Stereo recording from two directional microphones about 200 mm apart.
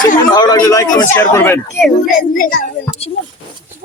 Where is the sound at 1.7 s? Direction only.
Centre (ahead or behind).